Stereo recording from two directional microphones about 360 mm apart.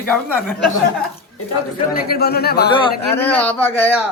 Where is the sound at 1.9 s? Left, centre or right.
Left.